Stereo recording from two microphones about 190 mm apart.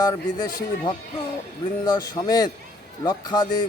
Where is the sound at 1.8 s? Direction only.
20° left (ahead or behind).